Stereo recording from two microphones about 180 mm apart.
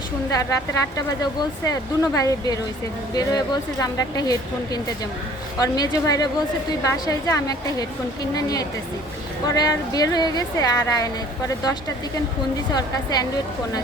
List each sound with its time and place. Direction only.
0.9 s a woman's voice: 20° left (ahead or behind)